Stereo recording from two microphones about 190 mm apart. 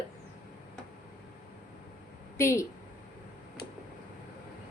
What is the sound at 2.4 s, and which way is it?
Speech, 15° left (ahead or behind).